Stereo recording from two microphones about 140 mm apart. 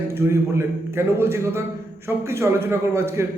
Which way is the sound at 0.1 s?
15° right (ahead or behind).